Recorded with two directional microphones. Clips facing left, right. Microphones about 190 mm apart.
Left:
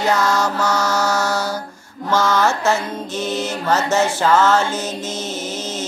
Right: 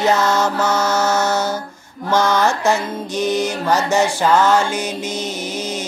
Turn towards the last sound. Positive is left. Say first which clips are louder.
# right 1 dB
turn(degrees=-15)  # may be behind; listen again after turning